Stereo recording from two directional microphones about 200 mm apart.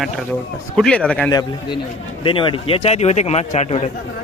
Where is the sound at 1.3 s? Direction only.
20° left (ahead or behind).